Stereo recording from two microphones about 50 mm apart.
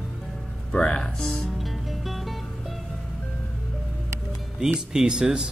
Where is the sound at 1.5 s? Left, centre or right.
Centre.